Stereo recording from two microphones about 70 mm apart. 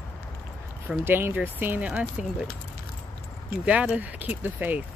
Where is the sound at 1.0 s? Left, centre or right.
Right.